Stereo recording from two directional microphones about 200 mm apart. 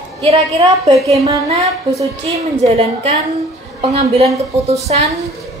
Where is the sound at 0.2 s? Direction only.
30° right (ahead or behind).